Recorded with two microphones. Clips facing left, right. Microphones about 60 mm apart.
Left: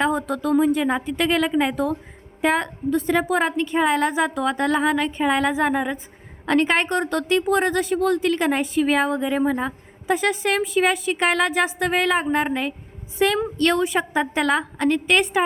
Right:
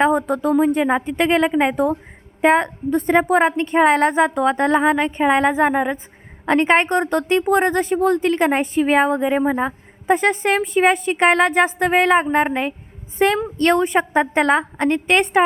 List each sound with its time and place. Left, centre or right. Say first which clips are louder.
0.0 s a woman's voice: right 5 dB; right